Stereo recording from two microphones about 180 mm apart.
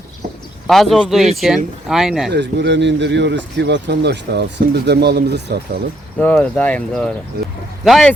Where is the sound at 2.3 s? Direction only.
75° right (ahead or behind).